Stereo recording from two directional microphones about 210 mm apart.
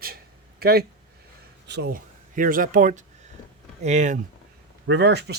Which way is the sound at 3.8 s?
35° right (ahead or behind).